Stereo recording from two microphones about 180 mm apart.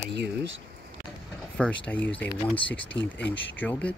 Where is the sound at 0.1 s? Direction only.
70° right (ahead or behind).